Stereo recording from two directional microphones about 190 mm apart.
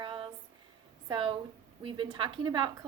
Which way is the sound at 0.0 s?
25° right (ahead or behind).